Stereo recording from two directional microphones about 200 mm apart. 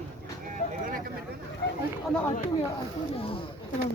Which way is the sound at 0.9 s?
45° right (ahead or behind).